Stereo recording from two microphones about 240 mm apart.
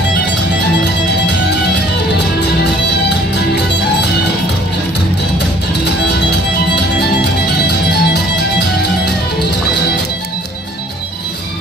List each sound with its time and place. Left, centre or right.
6.7 s music: left